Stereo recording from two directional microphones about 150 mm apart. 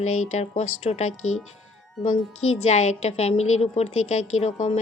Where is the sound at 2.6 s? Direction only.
50° left (ahead or behind).